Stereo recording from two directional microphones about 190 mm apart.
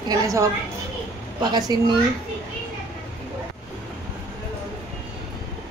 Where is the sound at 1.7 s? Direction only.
20° right (ahead or behind).